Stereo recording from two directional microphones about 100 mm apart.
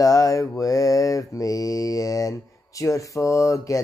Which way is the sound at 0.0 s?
35° left (ahead or behind).